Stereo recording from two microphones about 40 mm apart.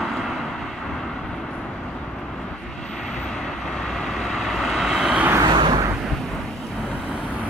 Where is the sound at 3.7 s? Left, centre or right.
Centre.